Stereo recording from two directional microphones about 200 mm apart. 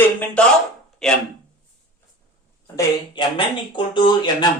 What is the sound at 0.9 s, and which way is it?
Speech, 5° left (ahead or behind).